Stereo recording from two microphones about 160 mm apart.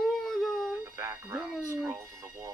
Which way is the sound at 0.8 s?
15° right (ahead or behind).